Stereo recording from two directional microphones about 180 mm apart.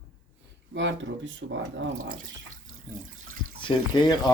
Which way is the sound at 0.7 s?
90° right.